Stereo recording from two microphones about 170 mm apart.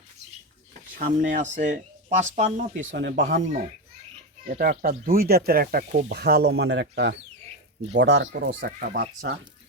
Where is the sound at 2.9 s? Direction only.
90° right.